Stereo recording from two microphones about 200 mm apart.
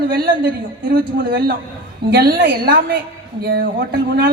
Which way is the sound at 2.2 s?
45° right (ahead or behind).